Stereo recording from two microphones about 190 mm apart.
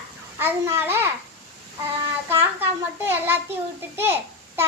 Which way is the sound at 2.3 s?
10° right (ahead or behind).